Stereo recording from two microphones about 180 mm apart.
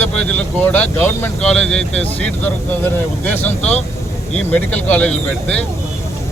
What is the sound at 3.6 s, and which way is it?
Speech, 35° left (ahead or behind).